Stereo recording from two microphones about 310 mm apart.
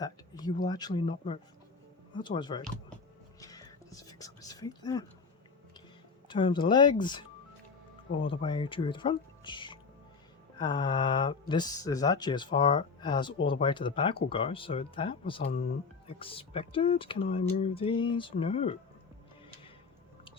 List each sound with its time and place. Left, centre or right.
0.0 s speech: centre
3.4 s whispering: centre
6.2 s speech: centre